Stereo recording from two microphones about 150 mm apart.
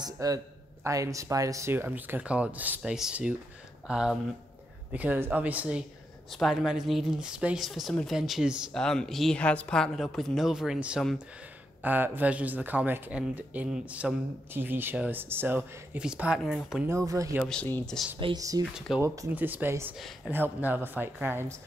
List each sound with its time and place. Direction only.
0.0 s speech: 25° right (ahead or behind); by 16.8 s 5° right (ahead or behind)
16.8 s speech: 20° right (ahead or behind)
17.5 s speech: 10° left (ahead or behind)
18.2 s speech: 25° right (ahead or behind)
18.7 s speech: 5° right (ahead or behind)